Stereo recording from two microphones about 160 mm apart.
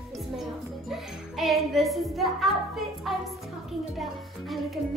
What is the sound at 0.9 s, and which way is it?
Music, centre (ahead or behind).